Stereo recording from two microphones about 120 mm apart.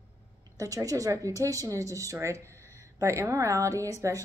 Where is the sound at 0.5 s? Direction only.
30° right (ahead or behind).